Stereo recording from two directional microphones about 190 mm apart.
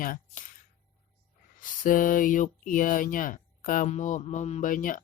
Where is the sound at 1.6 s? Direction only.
45° left (ahead or behind).